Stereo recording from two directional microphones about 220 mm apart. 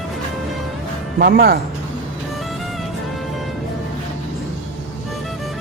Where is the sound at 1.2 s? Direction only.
45° right (ahead or behind).